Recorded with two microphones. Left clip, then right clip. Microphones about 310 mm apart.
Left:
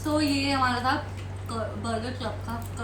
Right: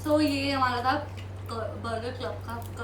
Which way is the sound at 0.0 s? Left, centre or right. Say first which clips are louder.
Right 1 dB; centre.